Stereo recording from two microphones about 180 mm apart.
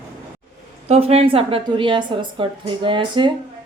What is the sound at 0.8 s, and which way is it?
A woman's voice, 35° right (ahead or behind).